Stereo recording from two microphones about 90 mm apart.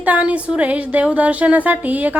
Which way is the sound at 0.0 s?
15° right (ahead or behind).